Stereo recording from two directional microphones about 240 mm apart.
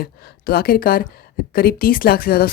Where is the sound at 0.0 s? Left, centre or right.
Left.